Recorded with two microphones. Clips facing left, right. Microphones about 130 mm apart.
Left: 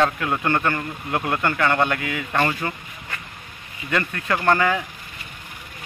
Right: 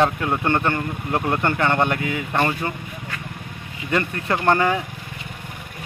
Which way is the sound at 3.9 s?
20° right (ahead or behind).